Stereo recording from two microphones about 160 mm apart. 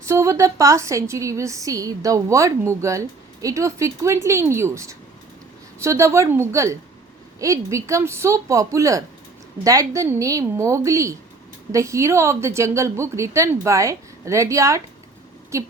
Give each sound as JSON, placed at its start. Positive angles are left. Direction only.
{"t": 0.0, "sound": "a woman's voice", "side_deg": -20}